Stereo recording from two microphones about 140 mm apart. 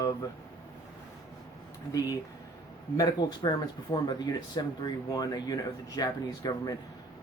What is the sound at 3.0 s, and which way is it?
Speech, 30° left (ahead or behind).